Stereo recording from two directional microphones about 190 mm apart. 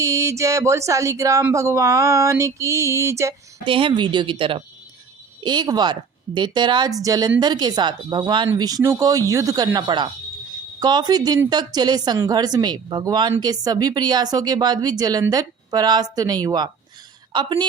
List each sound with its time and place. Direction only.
0.0 s speech: 15° right (ahead or behind)
3.7 s speech: 25° right (ahead or behind)